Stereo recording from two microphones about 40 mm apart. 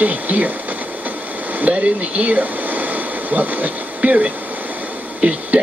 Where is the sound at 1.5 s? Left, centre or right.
Right.